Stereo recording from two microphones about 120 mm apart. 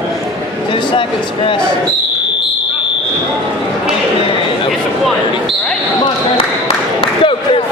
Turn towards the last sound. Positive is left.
turn(degrees=50)  # may be behind; listen again after turning